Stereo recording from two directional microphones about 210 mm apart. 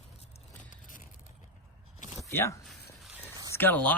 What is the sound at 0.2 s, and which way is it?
Vehicle, 35° left (ahead or behind).